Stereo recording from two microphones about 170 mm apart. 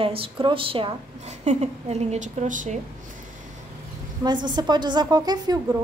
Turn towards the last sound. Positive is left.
turn(degrees=-25)  # may be behind; listen again after turning